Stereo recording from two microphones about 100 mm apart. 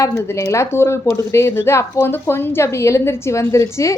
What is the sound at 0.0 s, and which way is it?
A woman's voice, 30° left (ahead or behind).